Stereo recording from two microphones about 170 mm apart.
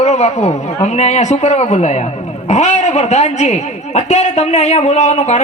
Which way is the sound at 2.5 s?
45° left (ahead or behind).